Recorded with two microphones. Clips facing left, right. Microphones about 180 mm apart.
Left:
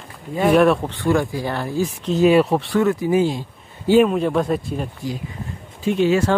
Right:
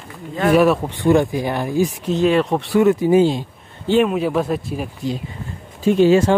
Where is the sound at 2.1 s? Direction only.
5° left (ahead or behind).